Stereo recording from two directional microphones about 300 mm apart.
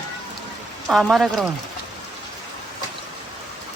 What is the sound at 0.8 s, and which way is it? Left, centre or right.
Speech, centre.